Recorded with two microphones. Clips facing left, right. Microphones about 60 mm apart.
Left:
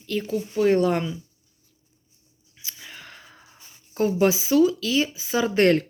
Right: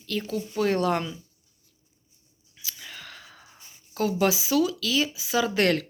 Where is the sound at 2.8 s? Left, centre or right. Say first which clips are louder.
Left 1 dB; centre.